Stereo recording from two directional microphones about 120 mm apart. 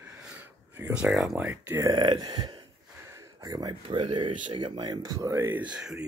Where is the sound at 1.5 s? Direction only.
25° right (ahead or behind).